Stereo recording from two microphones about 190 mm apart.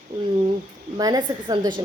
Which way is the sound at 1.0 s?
20° right (ahead or behind).